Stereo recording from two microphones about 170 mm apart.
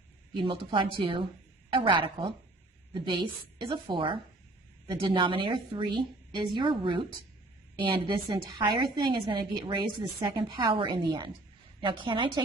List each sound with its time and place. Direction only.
0.3 s a woman's voice: 30° right (ahead or behind)
3.7 s a woman's voice: 30° right (ahead or behind)